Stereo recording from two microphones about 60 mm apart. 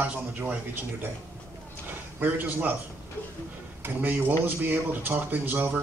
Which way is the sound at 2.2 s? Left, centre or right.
Right.